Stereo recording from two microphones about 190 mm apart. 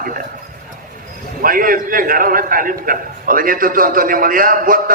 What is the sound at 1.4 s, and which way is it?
A man's voice, 45° right (ahead or behind).